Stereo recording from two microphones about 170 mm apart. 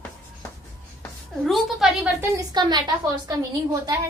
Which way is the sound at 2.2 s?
20° right (ahead or behind).